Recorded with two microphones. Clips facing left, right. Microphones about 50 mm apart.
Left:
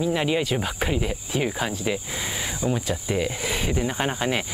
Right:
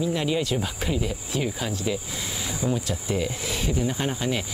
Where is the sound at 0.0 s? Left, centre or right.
Left.